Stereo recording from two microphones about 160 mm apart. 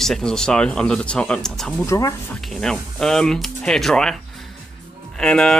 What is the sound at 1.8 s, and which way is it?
Speech, 20° left (ahead or behind).